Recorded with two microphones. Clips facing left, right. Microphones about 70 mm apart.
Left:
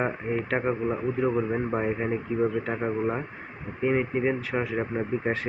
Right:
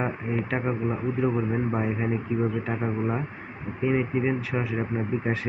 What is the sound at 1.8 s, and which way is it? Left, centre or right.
Speech, left.